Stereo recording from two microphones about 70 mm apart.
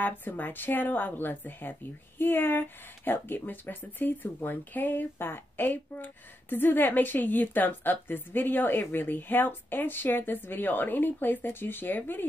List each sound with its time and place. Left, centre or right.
0.0 s a woman's voice: left